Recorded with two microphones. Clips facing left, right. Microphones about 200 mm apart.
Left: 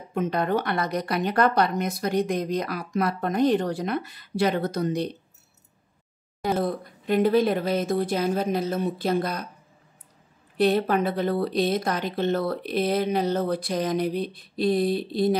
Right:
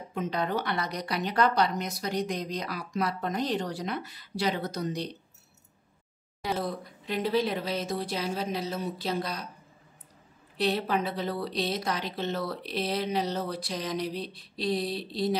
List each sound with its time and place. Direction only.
0.1 s a woman's voice: 55° left (ahead or behind)
6.4 s a woman's voice: 50° left (ahead or behind)
10.6 s a woman's voice: 50° left (ahead or behind)